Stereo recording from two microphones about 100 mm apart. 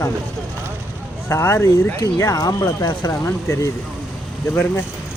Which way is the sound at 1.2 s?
25° left (ahead or behind).